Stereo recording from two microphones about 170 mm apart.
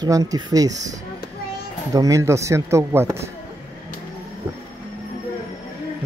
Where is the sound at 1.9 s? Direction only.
20° right (ahead or behind).